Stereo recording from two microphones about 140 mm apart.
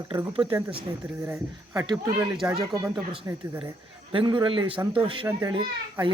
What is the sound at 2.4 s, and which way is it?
Speech, 15° right (ahead or behind).